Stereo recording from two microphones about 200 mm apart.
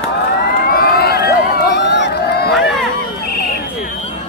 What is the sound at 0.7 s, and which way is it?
Crowd, 50° left (ahead or behind).